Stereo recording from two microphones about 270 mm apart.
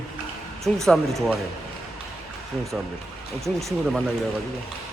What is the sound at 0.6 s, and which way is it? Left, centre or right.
Speech, centre.